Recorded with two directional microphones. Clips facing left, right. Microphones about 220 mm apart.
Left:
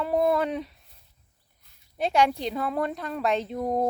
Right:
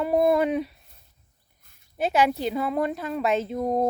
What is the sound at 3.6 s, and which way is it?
Speech, 15° right (ahead or behind).